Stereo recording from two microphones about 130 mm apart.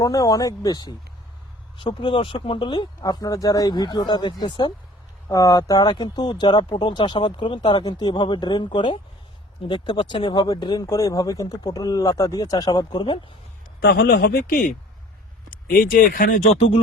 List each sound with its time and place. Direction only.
0.0 s speech: 25° left (ahead or behind)
14.4 s speech: 90° left
16.6 s speech: 45° left (ahead or behind)